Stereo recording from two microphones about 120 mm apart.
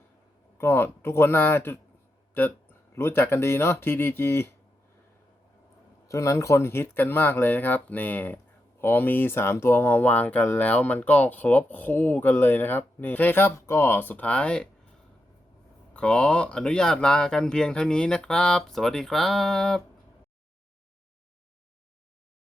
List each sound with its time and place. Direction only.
0.6 s speech: 20° left (ahead or behind)
2.9 s speech: 20° left (ahead or behind)
6.1 s speech: 25° left (ahead or behind); by 14.7 s 10° left (ahead or behind)
15.9 s speech: 10° left (ahead or behind)